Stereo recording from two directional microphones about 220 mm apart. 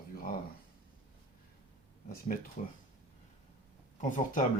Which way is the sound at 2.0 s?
40° left (ahead or behind).